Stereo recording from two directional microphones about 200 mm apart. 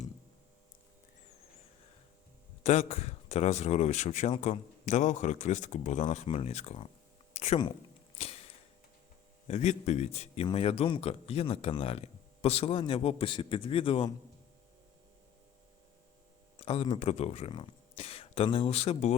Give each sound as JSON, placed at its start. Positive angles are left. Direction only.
{"t": 2.6, "sound": "speech", "side_deg": 35}
{"t": 8.2, "sound": "a sound", "side_deg": 30}
{"t": 9.5, "sound": "speech", "side_deg": 35}
{"t": 16.6, "sound": "speech", "side_deg": 30}